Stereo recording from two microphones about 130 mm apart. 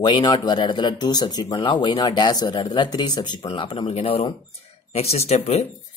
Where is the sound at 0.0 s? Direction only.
35° left (ahead or behind).